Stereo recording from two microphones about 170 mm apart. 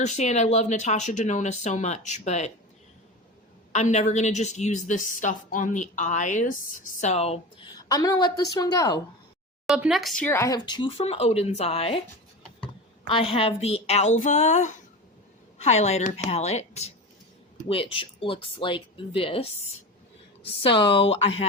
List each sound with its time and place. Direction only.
0.0 s a woman's voice: 45° left (ahead or behind)
3.7 s a woman's voice: 45° left (ahead or behind)
7.8 s a woman's voice: 20° left (ahead or behind)
9.6 s speech: 5° right (ahead or behind)
10.2 s speech: 15° left (ahead or behind); by 12.0 s 35° left (ahead or behind)
13.1 s speech: 30° left (ahead or behind)